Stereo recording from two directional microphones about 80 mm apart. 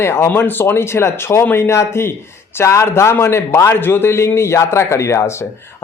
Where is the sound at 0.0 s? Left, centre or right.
Left.